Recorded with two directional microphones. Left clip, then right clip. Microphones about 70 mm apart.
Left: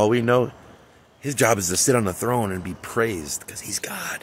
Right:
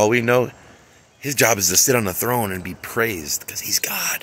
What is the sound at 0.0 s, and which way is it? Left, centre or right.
Speech, left.